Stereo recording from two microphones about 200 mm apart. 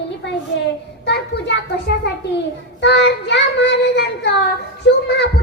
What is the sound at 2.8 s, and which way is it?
Child singing, 60° left (ahead or behind).